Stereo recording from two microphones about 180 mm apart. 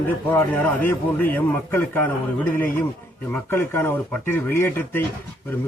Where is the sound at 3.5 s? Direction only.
10° left (ahead or behind).